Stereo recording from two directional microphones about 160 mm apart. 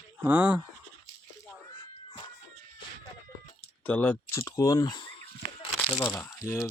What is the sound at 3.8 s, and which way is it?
Speech, 10° left (ahead or behind).